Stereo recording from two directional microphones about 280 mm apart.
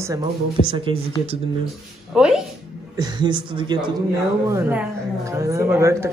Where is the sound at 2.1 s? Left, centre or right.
Centre.